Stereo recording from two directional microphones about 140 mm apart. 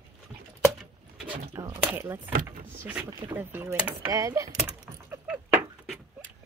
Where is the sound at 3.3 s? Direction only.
15° right (ahead or behind).